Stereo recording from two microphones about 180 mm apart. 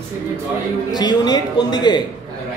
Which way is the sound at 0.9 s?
20° left (ahead or behind).